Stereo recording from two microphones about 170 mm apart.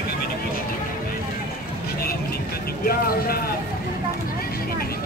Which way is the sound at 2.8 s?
60° left (ahead or behind).